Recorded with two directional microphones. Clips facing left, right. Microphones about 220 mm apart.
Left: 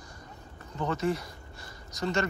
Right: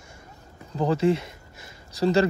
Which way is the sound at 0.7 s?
30° right (ahead or behind).